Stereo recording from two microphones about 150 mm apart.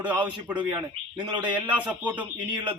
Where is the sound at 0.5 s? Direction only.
30° right (ahead or behind).